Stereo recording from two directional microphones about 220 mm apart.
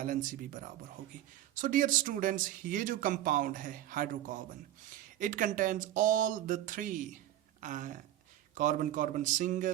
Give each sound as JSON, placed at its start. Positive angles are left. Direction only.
{"t": 0.0, "sound": "speech", "side_deg": -35}